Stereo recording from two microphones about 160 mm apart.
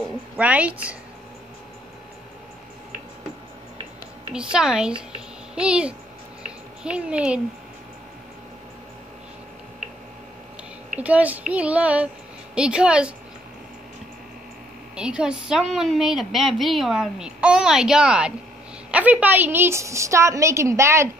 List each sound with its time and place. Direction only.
0.4 s a woman's voice: 10° right (ahead or behind)
4.3 s a woman's voice: 5° right (ahead or behind)
6.4 s a sound: 5° right (ahead or behind)
11.0 s a woman's voice: 10° right (ahead or behind)
15.0 s a woman's voice: 5° right (ahead or behind)